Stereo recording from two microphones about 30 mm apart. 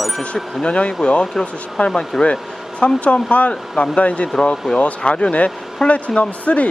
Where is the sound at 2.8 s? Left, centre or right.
Left.